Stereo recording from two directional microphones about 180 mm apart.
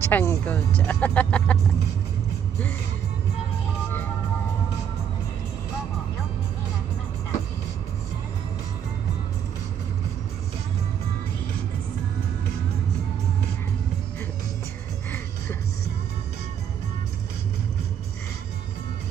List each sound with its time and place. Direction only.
0.0 s speech: 15° left (ahead or behind)
15.0 s music: 10° left (ahead or behind)